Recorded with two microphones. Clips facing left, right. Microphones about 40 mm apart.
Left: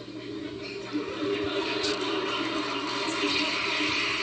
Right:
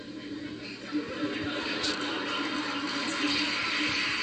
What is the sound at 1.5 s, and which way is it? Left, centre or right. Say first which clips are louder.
Music: left 3 dB; left.